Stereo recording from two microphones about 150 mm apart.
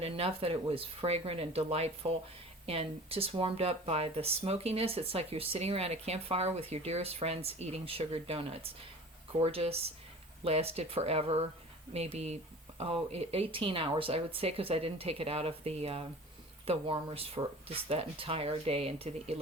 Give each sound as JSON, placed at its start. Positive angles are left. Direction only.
{"t": 0.0, "sound": "speech", "side_deg": -40}